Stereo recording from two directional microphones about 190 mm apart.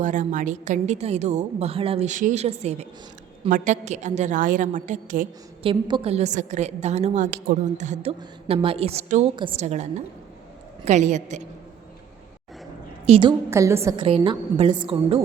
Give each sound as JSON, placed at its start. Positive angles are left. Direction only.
{"t": 0.0, "sound": "a woman's voice", "side_deg": -40}
{"t": 5.6, "sound": "a woman's voice", "side_deg": -30}
{"t": 13.1, "sound": "a woman's voice", "side_deg": -25}
{"t": 13.5, "sound": "a woman's voice", "side_deg": -15}
{"t": 14.0, "sound": "a woman's voice", "side_deg": -25}